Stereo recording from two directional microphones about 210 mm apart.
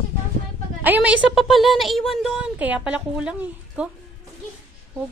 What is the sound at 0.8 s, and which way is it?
A woman's voice, 5° right (ahead or behind).